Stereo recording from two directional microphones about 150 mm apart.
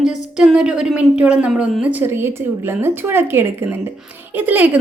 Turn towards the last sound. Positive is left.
turn(degrees=-10)  # may be behind; listen again after turning